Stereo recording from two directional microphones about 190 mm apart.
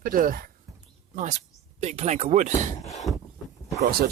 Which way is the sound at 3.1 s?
Centre (ahead or behind).